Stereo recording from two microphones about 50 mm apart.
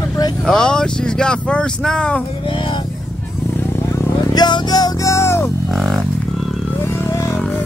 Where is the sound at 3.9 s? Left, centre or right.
Left.